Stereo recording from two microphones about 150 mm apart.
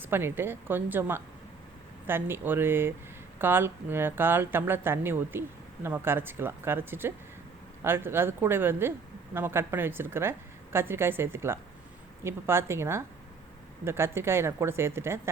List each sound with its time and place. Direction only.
0.0 s speech: 15° right (ahead or behind)